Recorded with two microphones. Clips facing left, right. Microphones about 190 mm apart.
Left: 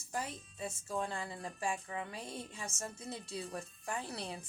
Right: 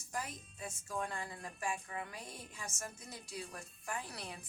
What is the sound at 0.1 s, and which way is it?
Music, 30° left (ahead or behind).